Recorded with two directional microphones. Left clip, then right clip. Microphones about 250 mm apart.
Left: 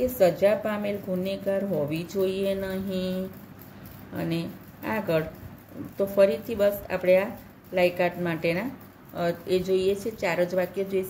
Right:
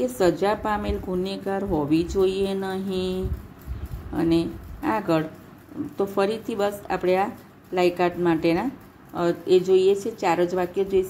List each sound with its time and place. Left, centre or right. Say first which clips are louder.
0.2 s a woman's voice: left 1 dB; centre
4.2 s a woman's voice: right 9 dB; centre